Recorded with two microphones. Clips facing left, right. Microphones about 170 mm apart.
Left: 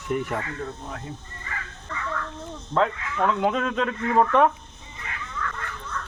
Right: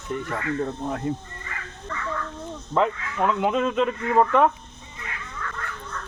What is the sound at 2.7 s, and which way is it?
Speech, 5° right (ahead or behind).